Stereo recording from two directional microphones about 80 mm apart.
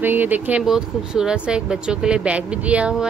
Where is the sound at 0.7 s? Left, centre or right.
Centre.